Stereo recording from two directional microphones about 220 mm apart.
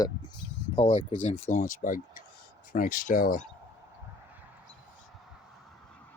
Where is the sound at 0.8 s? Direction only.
35° left (ahead or behind).